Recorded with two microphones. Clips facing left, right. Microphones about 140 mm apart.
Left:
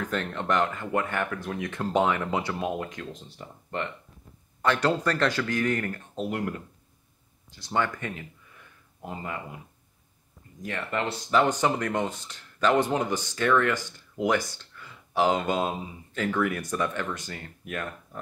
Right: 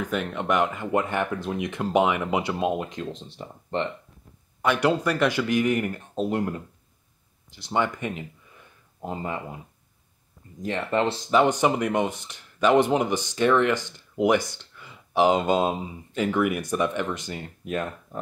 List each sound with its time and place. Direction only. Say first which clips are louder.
0.0 s speech: right 2 dB; 10° right (ahead or behind)
4.6 s speech: right 2 dB; 10° right (ahead or behind)
10.6 s speech: right 6 dB; 25° right (ahead or behind)